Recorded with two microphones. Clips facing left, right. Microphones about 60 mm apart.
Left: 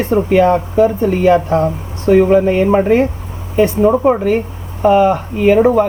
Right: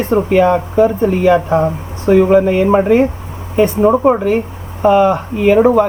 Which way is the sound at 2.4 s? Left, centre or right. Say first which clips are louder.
Even; left.